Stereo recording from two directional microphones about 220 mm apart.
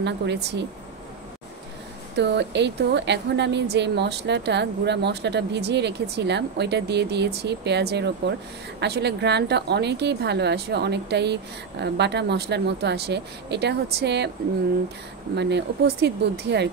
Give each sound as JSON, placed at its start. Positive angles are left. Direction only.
{"t": 0.0, "sound": "speech", "side_deg": -50}
{"t": 2.1, "sound": "speech", "side_deg": -50}
{"t": 15.3, "sound": "speech", "side_deg": -50}